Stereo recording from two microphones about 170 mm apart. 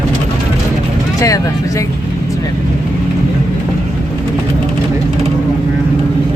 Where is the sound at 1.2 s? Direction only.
20° left (ahead or behind).